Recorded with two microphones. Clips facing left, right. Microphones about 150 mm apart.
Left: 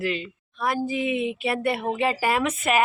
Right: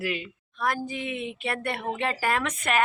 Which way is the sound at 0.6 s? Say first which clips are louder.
Left 4 dB; 5° left (ahead or behind).